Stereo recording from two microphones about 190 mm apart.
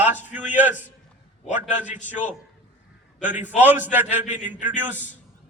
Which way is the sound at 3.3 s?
10° right (ahead or behind).